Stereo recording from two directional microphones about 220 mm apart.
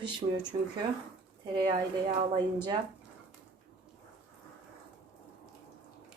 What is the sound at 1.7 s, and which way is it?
Speech, 25° right (ahead or behind).